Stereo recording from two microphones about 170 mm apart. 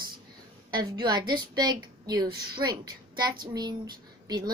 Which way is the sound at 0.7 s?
25° right (ahead or behind).